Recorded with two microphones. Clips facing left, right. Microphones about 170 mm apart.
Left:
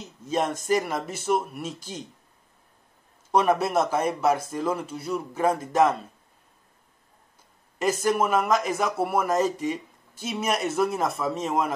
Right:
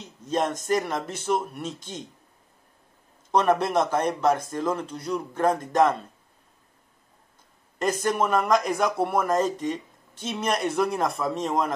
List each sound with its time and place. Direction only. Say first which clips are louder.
0.0 s speech: even; 5° left (ahead or behind)
3.3 s a man's voice: even; 5° left (ahead or behind)
7.8 s speech: left 1 dB; 5° left (ahead or behind)